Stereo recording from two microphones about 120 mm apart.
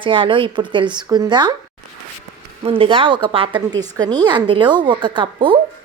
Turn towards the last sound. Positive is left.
turn(degrees=-40)  # may be behind; listen again after turning